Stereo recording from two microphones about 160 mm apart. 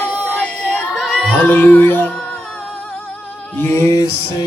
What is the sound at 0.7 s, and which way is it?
Singing, 5° left (ahead or behind).